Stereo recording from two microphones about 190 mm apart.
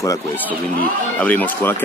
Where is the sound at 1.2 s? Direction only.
10° left (ahead or behind).